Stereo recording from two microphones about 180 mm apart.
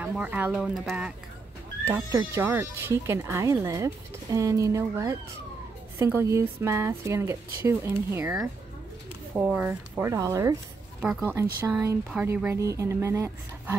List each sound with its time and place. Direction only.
0.0 s speech: 5° right (ahead or behind)
1.9 s speech: 15° right (ahead or behind)
11.0 s speech: 5° right (ahead or behind)
11.7 s speech: 15° right (ahead or behind)